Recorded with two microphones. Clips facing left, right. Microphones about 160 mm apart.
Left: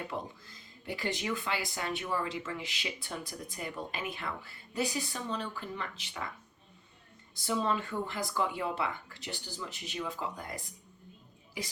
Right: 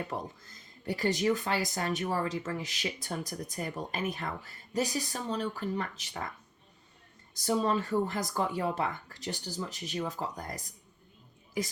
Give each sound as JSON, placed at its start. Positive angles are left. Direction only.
{"t": 0.1, "sound": "speech", "side_deg": -45}
{"t": 7.3, "sound": "speech", "side_deg": -40}